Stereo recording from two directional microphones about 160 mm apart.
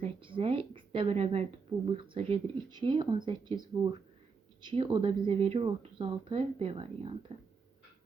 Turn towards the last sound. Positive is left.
turn(degrees=-35)  # may be behind; listen again after turning